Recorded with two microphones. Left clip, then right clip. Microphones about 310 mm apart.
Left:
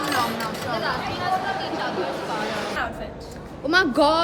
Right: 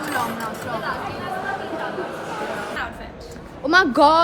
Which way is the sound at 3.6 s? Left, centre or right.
Centre.